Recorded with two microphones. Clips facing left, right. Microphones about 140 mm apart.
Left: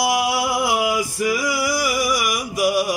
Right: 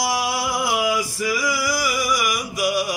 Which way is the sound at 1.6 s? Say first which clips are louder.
Left 2 dB; 50° left (ahead or behind).